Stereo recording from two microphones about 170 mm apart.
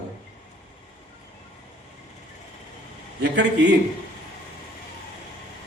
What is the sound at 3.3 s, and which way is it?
Speech, 90° right.